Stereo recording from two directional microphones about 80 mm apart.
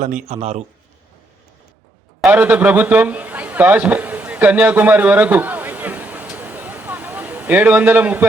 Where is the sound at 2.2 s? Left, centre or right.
Centre.